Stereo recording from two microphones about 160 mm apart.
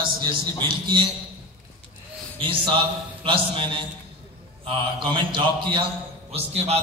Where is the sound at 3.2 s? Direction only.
35° right (ahead or behind).